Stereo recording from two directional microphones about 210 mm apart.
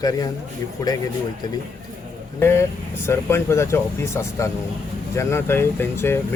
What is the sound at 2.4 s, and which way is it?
A man's voice, 10° left (ahead or behind).